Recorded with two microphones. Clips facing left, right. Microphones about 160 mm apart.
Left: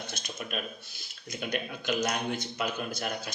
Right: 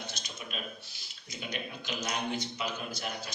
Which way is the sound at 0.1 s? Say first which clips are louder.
Left 5 dB; 55° left (ahead or behind).